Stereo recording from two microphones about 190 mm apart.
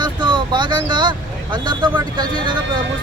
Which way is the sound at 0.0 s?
25° right (ahead or behind).